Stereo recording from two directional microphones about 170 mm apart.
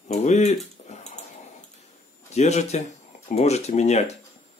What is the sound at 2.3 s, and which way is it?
Speech, 40° left (ahead or behind).